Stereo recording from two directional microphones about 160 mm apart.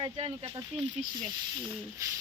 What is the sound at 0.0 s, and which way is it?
Speech, 30° right (ahead or behind).